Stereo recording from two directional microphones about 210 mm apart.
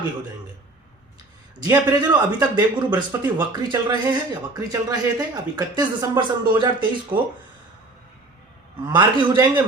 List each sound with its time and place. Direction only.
1.5 s speech: 15° right (ahead or behind)
8.9 s speech: 20° right (ahead or behind)